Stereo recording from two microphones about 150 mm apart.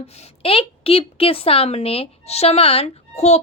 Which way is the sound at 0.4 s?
40° left (ahead or behind).